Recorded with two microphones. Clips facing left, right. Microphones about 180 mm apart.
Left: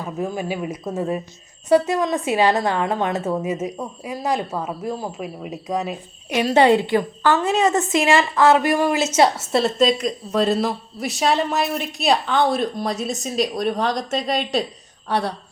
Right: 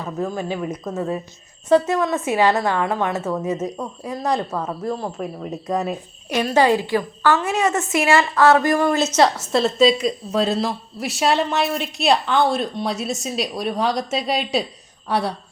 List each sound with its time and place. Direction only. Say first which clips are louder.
0.0 s a woman's voice: even; 10° left (ahead or behind)
3.5 s a woman's voice: right 1 dB; 10° left (ahead or behind)
6.5 s a woman's voice: left 2 dB; 25° left (ahead or behind)
7.3 s a woman's voice: left 2 dB; 35° left (ahead or behind)
7.9 s a woman's voice: right 3 dB; 20° left (ahead or behind); by 14.6 s 5° right (ahead or behind)